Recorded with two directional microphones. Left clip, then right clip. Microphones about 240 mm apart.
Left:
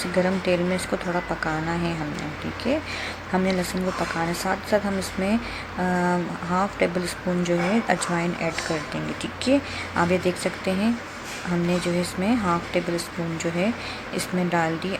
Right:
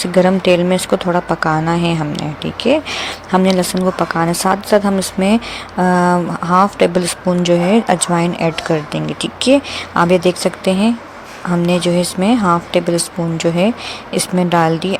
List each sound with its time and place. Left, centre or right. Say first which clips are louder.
0.0 s speech: right 11 dB; right